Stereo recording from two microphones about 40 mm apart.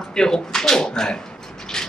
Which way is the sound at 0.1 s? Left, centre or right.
Centre.